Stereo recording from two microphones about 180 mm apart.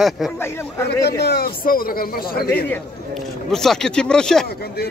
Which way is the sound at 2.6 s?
5° left (ahead or behind).